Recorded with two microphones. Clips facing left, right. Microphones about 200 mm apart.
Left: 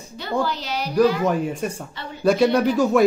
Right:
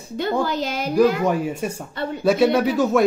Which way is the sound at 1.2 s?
5° right (ahead or behind).